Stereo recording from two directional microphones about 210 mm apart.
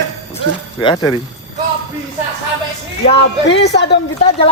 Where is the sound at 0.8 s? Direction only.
25° left (ahead or behind).